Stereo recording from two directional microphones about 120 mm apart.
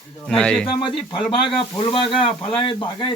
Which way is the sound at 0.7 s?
45° left (ahead or behind).